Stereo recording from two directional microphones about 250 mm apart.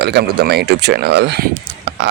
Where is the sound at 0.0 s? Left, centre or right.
Right.